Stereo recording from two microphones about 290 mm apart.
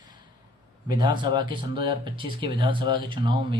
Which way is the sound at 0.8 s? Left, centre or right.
Centre.